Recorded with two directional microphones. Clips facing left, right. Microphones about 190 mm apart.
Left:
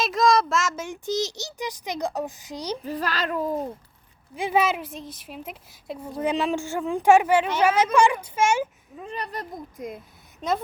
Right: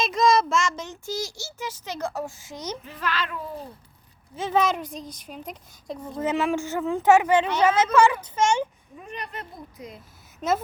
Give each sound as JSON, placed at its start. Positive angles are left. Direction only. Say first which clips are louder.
{"t": 0.0, "sound": "a child's voice", "louder": "even", "side_deg": 0}
{"t": 1.0, "sound": "a woman's voice", "louder": "left 6 dB", "side_deg": 20}
{"t": 2.8, "sound": "a child's voice", "louder": "left 2 dB", "side_deg": 40}
{"t": 4.4, "sound": "a woman's voice", "louder": "even", "side_deg": 10}
{"t": 9.0, "sound": "a child's voice", "louder": "left 4 dB", "side_deg": 35}
{"t": 10.4, "sound": "a woman's voice", "louder": "right 1 dB", "side_deg": 0}